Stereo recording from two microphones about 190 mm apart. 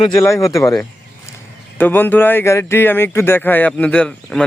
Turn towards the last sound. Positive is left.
turn(degrees=5)  # may be behind; listen again after turning